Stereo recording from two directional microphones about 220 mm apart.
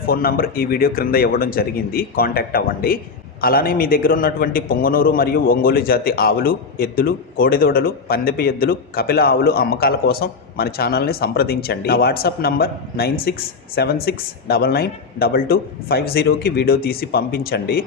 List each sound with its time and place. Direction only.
0.0 s speech: 40° left (ahead or behind)